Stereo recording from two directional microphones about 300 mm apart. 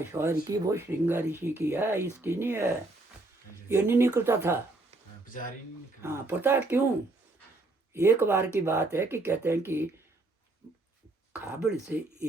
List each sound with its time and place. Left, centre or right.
0.0 s speech: centre
5.2 s a sound: left
6.0 s speech: centre
7.9 s speech: centre
11.3 s speech: centre